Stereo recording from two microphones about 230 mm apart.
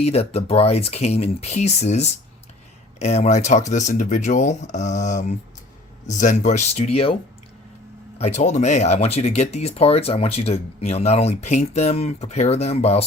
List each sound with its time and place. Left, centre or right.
0.0 s speech: left
8.2 s speech: left